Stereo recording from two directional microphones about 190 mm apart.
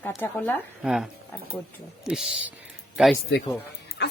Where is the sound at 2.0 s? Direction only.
5° right (ahead or behind).